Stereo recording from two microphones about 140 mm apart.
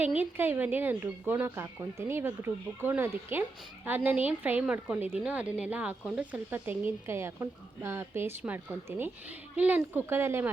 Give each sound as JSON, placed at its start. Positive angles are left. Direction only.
{"t": 0.0, "sound": "a woman's voice", "side_deg": -15}